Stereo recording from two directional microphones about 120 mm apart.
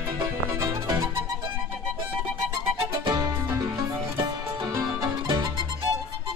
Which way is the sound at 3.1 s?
35° right (ahead or behind).